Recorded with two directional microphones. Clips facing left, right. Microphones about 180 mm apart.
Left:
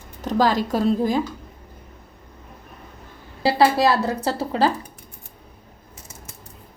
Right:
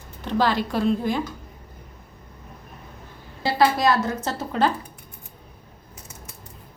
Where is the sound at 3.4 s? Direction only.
30° left (ahead or behind).